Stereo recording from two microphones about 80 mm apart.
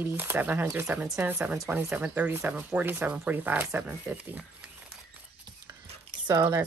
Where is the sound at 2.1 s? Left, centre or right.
Right.